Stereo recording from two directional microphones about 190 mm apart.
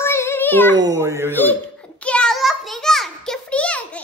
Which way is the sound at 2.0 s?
5° left (ahead or behind).